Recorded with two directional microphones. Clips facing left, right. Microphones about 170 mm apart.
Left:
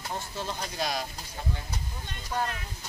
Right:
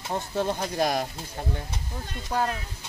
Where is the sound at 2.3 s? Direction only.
40° right (ahead or behind).